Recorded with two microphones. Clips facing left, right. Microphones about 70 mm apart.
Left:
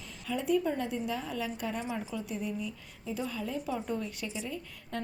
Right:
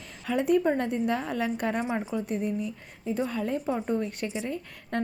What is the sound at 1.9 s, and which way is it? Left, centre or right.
Speech, right.